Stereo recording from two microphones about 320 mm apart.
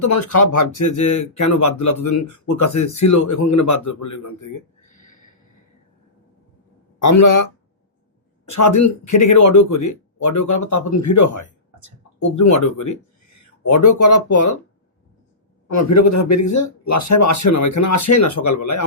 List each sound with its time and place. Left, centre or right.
0.0 s speech: left
7.0 s speech: left
8.4 s speech: left
15.6 s speech: left